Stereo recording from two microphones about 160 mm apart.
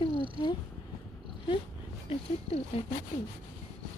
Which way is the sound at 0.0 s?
30° left (ahead or behind).